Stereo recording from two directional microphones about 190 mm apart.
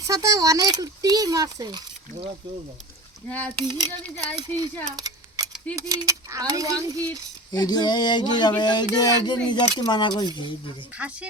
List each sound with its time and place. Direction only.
0.0 s speech: 20° right (ahead or behind)
3.2 s speech: 10° left (ahead or behind)
3.7 s speech: 25° right (ahead or behind)
5.7 s mechanisms: 15° right (ahead or behind)
7.5 s a sound: 20° left (ahead or behind)
10.9 s mechanisms: 5° right (ahead or behind)